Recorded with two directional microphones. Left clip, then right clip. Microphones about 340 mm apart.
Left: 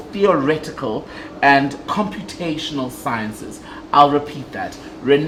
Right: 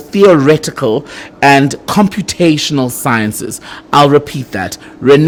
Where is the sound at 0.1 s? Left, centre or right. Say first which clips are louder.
Right 9 dB; right.